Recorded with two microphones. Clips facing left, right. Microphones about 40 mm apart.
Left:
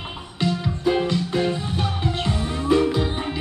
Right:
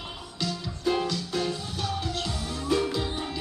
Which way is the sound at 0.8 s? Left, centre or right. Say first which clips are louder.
Left 5 dB; left.